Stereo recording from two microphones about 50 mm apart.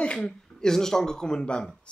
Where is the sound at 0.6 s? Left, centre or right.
Centre.